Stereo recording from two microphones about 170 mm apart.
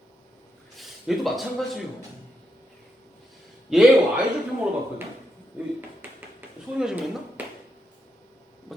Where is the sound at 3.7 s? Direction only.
5° right (ahead or behind).